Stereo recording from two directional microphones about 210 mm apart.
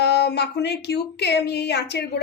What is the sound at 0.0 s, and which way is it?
Speech, 50° left (ahead or behind).